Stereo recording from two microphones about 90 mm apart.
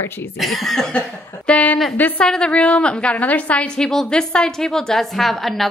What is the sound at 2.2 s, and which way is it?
A woman's voice, 10° left (ahead or behind).